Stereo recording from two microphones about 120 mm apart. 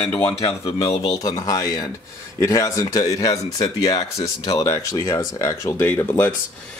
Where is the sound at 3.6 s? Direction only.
50° left (ahead or behind).